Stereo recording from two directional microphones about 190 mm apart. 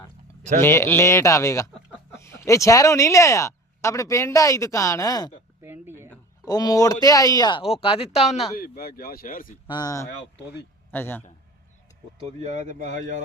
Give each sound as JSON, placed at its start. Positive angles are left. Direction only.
{"t": 0.6, "sound": "speech", "side_deg": 15}
{"t": 5.6, "sound": "a sound", "side_deg": -10}
{"t": 6.4, "sound": "speech", "side_deg": 20}
{"t": 8.5, "sound": "speech", "side_deg": 50}
{"t": 9.6, "sound": "speech", "side_deg": 20}
{"t": 12.5, "sound": "speech", "side_deg": -40}